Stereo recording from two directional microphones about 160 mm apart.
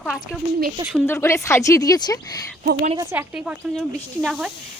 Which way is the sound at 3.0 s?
15° right (ahead or behind).